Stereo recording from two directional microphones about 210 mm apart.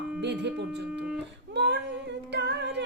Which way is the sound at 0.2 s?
55° right (ahead or behind).